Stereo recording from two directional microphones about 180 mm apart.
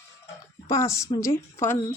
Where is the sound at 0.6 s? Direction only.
20° left (ahead or behind).